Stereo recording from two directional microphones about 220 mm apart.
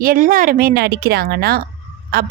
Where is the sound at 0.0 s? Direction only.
40° right (ahead or behind).